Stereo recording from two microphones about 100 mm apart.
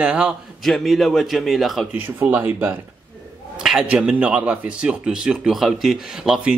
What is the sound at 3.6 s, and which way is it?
Speech, 5° right (ahead or behind).